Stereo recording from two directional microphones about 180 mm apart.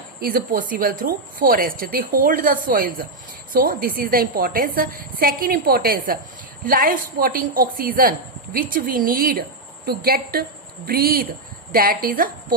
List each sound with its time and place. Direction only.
0.2 s a woman's voice: 55° right (ahead or behind)